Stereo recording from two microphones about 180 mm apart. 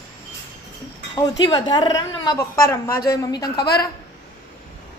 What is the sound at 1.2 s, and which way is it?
A woman's voice, 20° left (ahead or behind).